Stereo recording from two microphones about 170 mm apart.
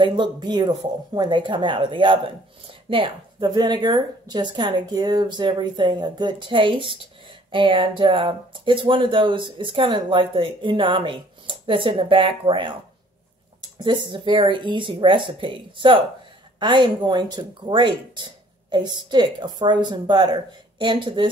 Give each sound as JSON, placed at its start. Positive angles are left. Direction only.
{"t": 0.0, "sound": "speech", "side_deg": -25}